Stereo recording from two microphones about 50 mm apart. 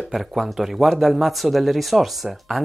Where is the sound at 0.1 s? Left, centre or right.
Centre.